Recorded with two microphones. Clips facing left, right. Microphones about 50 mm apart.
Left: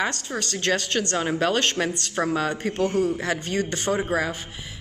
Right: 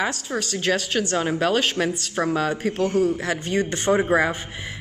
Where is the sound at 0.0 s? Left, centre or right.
Centre.